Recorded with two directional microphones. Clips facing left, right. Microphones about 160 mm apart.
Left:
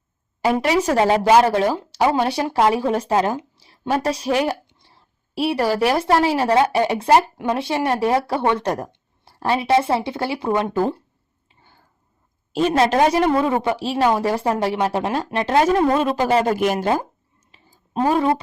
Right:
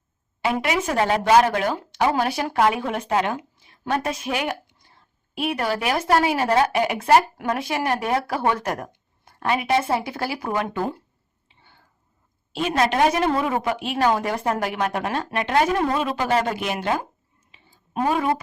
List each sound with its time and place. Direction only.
0.4 s speech: 40° left (ahead or behind)
0.9 s a woman's voice: 25° left (ahead or behind)
4.0 s a sound: 35° left (ahead or behind)
5.8 s a woman's voice: 30° left (ahead or behind)
11.4 s a sound: 40° left (ahead or behind)
12.7 s a woman's voice: 30° left (ahead or behind)
16.0 s a woman's voice: 40° left (ahead or behind)
17.9 s speech: 30° left (ahead or behind)